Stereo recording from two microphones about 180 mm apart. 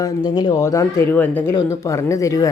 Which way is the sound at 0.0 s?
20° left (ahead or behind).